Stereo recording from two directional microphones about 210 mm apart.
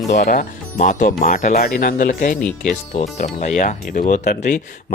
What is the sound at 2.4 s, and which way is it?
Speech, 5° left (ahead or behind).